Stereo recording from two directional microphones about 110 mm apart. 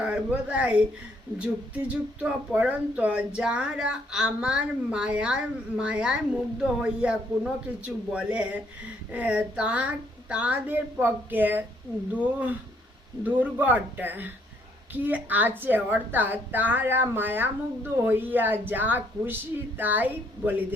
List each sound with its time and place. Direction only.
0.0 s speech: 10° right (ahead or behind)